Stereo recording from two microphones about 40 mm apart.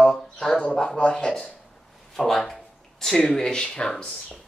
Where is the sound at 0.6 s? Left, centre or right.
Left.